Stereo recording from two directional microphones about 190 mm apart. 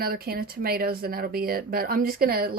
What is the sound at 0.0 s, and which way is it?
Speech, 55° right (ahead or behind).